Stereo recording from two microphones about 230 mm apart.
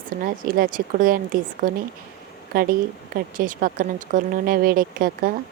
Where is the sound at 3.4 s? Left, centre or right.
Right.